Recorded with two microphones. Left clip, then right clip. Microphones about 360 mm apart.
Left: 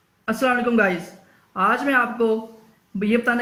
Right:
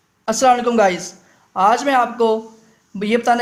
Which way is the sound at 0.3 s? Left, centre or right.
Centre.